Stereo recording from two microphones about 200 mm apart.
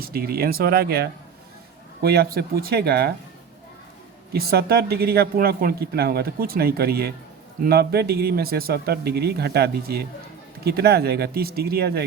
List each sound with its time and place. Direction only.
0.0 s speech: 50° right (ahead or behind)
4.3 s speech: 50° right (ahead or behind)